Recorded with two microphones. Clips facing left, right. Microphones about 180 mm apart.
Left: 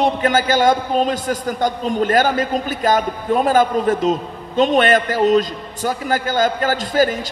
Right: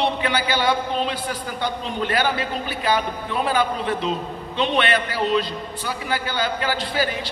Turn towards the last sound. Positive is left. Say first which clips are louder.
# left 7 dB
turn(degrees=45)  # may be behind; listen again after turning